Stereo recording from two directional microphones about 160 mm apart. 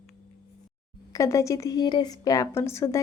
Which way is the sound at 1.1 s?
20° left (ahead or behind).